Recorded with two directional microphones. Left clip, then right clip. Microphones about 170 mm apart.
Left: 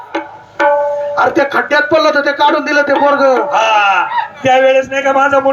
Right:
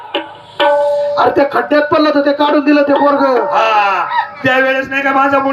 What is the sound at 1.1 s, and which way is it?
A man's voice, 30° left (ahead or behind).